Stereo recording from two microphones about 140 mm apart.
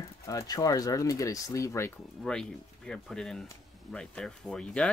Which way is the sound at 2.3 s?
5° left (ahead or behind).